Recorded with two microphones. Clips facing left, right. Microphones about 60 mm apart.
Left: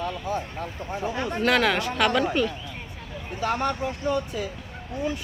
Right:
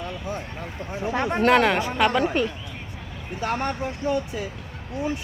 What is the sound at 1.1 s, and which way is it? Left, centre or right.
Speech, right.